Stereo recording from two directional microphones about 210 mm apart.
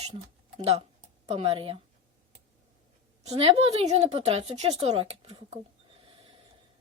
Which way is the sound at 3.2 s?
30° right (ahead or behind).